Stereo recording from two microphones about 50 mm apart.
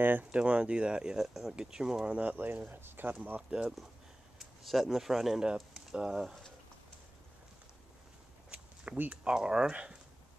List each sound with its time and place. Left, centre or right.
0.2 s speech: right
2.3 s speech: right
3.3 s speech: right
4.4 s speech: centre
9.1 s speech: centre